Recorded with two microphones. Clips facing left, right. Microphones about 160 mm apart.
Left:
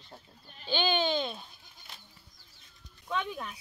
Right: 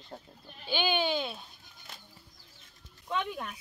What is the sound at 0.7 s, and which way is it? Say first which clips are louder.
Speech: left 1 dB; 10° right (ahead or behind).